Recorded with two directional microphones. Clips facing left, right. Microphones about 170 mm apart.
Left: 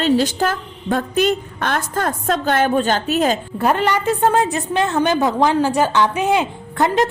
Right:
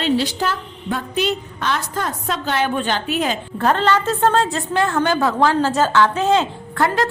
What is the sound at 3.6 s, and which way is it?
A woman's voice, 10° left (ahead or behind).